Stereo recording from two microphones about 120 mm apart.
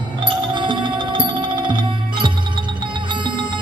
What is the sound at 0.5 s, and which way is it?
Music, 40° right (ahead or behind).